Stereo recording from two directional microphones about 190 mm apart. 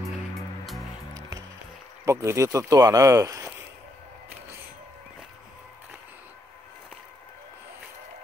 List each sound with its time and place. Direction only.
2.0 s speech: 15° right (ahead or behind)